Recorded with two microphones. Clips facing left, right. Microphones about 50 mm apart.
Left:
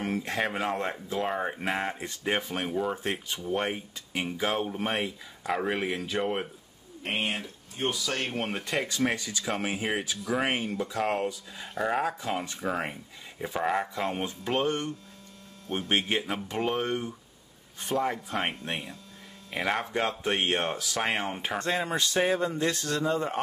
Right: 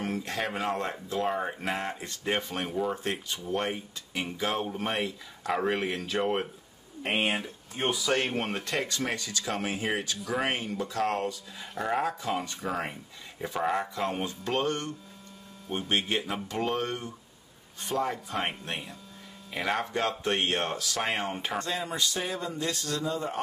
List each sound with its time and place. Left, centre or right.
0.0 s a sound: left
0.4 s speech: centre
1.8 s speech: centre
7.8 s speech: centre
14.2 s speech: centre
18.7 s speech: centre
21.5 s speech: left